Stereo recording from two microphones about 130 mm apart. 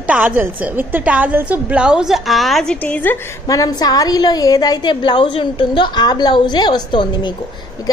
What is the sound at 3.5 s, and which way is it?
A woman's voice, 30° left (ahead or behind).